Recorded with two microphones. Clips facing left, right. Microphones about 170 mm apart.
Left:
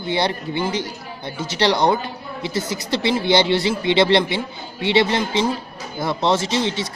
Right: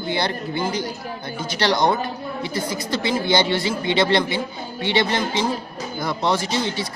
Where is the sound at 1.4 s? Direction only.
25° left (ahead or behind).